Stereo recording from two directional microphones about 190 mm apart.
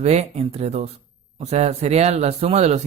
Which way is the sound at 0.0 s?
35° right (ahead or behind).